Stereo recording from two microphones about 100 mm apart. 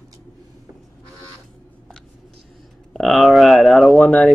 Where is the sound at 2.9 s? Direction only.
Centre (ahead or behind).